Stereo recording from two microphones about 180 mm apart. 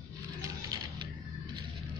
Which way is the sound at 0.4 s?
20° right (ahead or behind).